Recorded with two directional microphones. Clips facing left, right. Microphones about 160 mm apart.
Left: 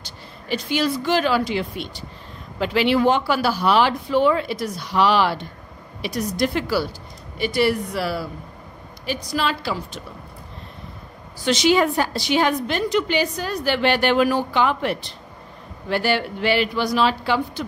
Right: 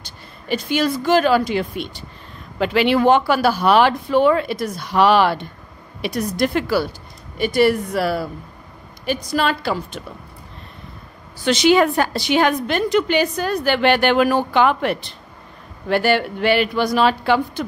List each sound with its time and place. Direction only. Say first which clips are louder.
0.0 s a woman's voice: even; 50° right (ahead or behind)
11.4 s a woman's voice: right 3 dB; 60° right (ahead or behind)